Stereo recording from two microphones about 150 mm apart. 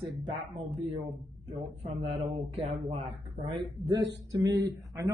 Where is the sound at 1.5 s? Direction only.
40° right (ahead or behind).